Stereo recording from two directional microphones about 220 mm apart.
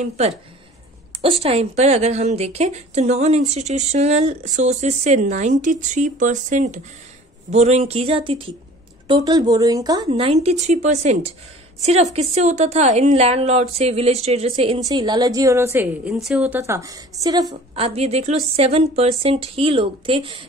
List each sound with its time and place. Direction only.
1.2 s a woman's voice: 25° right (ahead or behind)